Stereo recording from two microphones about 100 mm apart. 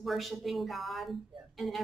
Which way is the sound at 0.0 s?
Centre (ahead or behind).